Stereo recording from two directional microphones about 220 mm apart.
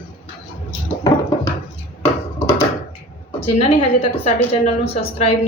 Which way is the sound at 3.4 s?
25° left (ahead or behind).